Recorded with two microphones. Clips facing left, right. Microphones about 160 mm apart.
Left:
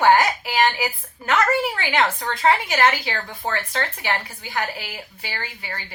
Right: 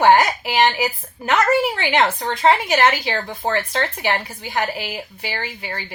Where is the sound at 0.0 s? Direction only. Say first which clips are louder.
Right 2 dB; 20° right (ahead or behind).